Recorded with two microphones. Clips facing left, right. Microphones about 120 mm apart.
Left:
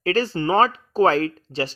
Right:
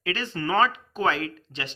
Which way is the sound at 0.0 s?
35° left (ahead or behind).